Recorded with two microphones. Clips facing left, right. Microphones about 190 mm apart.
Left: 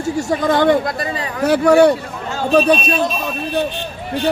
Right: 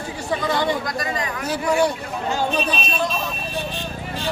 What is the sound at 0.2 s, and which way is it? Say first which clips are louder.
Speech: left 6 dB; 45° left (ahead or behind).